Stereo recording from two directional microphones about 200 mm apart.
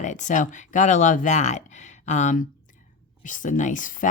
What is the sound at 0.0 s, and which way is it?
Speech, 35° left (ahead or behind).